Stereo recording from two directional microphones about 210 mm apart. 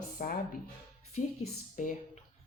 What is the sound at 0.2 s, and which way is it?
Speech, 40° left (ahead or behind).